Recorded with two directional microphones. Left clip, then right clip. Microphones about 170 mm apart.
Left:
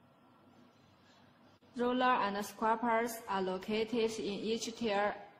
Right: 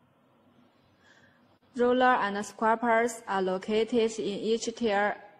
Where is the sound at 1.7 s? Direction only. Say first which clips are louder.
Right 8 dB; 30° right (ahead or behind).